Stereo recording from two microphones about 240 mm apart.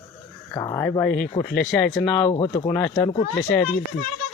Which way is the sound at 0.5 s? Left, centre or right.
Centre.